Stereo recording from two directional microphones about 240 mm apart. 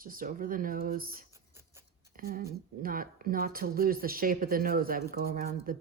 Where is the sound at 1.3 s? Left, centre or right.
Centre.